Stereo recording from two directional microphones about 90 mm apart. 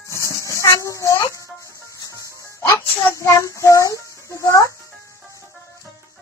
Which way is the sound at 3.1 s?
35° left (ahead or behind).